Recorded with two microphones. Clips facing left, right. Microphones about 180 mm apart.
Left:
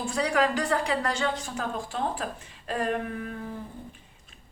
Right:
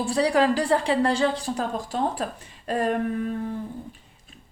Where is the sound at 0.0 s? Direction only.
35° right (ahead or behind).